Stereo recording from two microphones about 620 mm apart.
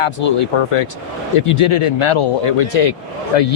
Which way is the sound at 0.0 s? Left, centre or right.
Left.